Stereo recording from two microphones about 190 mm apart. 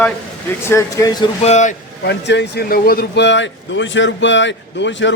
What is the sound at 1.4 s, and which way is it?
Speech, 35° left (ahead or behind).